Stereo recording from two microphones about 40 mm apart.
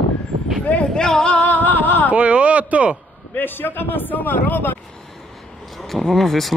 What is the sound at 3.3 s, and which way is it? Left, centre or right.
A man's voice, left.